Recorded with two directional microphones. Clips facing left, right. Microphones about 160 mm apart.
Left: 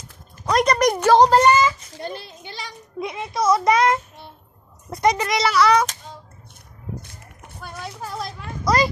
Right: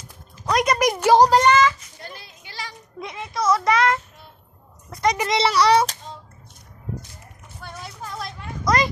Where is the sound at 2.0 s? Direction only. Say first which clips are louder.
Left 9 dB; 25° left (ahead or behind).